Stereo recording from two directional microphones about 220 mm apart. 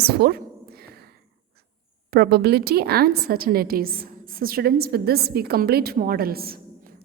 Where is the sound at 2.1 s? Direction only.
45° right (ahead or behind).